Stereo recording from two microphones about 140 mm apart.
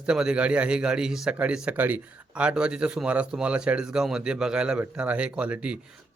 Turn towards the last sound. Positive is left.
turn(degrees=-10)  # may be behind; listen again after turning